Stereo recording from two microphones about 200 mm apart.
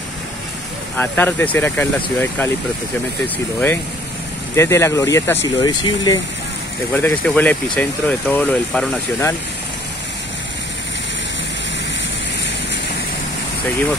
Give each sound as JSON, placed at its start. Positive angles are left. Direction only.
{"t": 0.9, "sound": "speech", "side_deg": 10}
{"t": 4.6, "sound": "speech", "side_deg": 15}
{"t": 6.9, "sound": "speech", "side_deg": 10}